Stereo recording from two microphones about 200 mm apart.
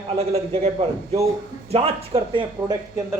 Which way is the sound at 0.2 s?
30° right (ahead or behind).